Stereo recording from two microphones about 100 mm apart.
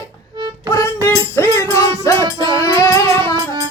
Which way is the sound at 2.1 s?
50° right (ahead or behind).